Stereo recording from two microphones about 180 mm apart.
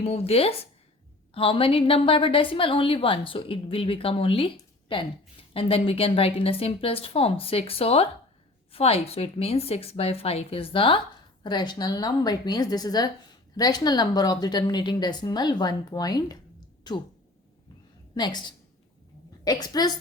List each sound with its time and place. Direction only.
0.0 s a woman's voice: 35° left (ahead or behind)
18.1 s a woman's voice: 25° left (ahead or behind)